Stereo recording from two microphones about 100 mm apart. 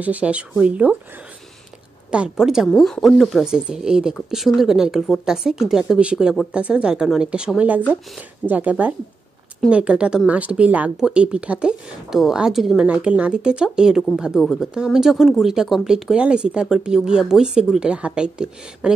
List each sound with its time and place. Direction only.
0.0 s speech: 15° right (ahead or behind)
2.0 s a woman's voice: 10° right (ahead or behind)